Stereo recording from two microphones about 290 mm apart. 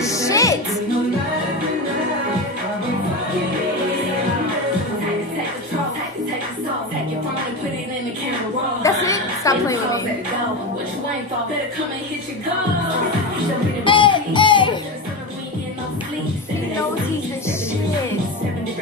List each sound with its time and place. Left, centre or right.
0.0 s music: centre
8.8 s chuckle: centre
13.8 s music: centre